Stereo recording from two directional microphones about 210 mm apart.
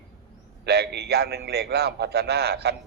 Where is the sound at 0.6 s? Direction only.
50° right (ahead or behind).